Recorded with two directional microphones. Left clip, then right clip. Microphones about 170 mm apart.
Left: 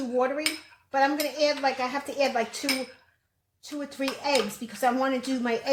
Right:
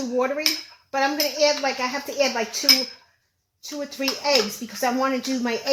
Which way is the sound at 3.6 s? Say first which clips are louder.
Right 4 dB; 25° right (ahead or behind).